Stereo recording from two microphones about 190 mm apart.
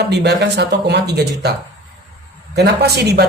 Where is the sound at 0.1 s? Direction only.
60° right (ahead or behind).